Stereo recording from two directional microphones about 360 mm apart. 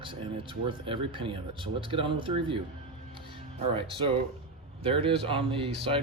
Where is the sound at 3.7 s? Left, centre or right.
Centre.